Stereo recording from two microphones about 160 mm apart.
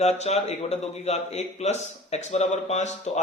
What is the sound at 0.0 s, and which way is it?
A man's voice, 45° left (ahead or behind).